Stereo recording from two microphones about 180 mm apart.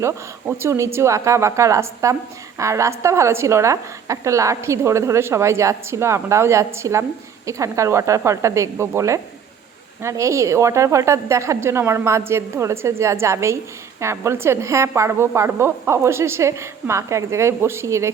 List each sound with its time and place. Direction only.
0.0 s a woman's voice: 15° right (ahead or behind)